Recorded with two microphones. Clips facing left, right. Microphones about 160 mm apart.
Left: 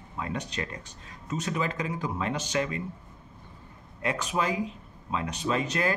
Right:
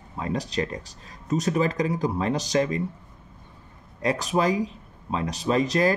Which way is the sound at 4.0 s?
35° right (ahead or behind).